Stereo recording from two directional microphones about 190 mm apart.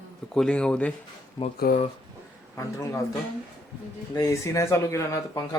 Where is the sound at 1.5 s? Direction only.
50° left (ahead or behind).